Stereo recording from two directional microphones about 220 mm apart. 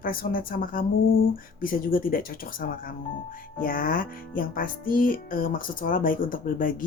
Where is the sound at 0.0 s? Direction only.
40° left (ahead or behind).